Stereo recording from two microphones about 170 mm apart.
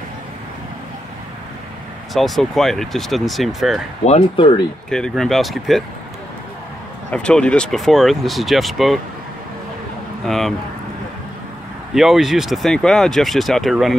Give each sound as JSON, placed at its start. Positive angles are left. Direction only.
{"t": 2.1, "sound": "speech", "side_deg": 0}
{"t": 4.0, "sound": "speech", "side_deg": 40}
{"t": 4.8, "sound": "speech", "side_deg": 5}
{"t": 7.1, "sound": "speech", "side_deg": 5}
{"t": 10.2, "sound": "speech", "side_deg": 0}
{"t": 11.9, "sound": "speech", "side_deg": 0}